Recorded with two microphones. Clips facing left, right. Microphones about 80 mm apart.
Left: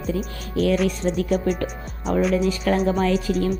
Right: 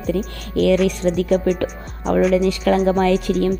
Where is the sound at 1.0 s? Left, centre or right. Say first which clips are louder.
Right 4 dB; right.